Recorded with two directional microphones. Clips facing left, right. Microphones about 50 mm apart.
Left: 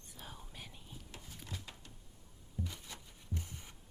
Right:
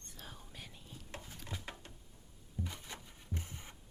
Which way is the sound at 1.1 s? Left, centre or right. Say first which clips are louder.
Right 3 dB; right.